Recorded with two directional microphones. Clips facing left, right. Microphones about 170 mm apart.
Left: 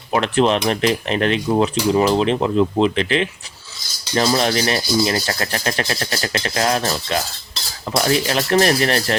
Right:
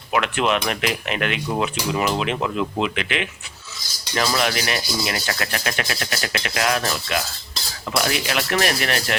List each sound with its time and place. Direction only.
0.1 s speech: 35° left (ahead or behind)